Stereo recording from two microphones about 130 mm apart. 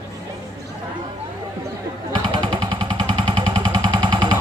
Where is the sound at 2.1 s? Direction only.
35° right (ahead or behind).